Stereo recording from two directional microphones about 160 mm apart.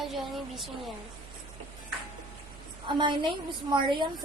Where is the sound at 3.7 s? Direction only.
30° right (ahead or behind).